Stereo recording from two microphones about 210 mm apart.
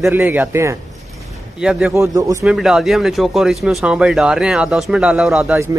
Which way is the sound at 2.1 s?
15° right (ahead or behind).